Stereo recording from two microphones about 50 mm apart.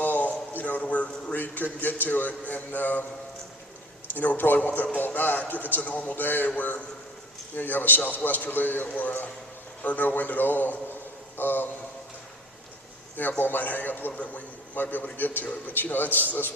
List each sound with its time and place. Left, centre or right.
0.0 s a sound: left
1.8 s speech: left
4.1 s speech: left
13.1 s speech: left